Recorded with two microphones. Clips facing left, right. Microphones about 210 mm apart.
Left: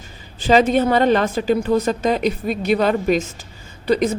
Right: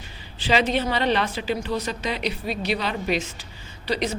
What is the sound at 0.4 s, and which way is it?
A woman's voice, 45° left (ahead or behind).